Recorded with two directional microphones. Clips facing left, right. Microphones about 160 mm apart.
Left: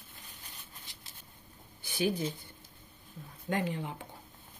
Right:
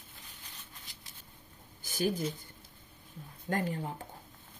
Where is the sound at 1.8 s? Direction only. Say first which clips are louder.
Left 1 dB; 40° right (ahead or behind).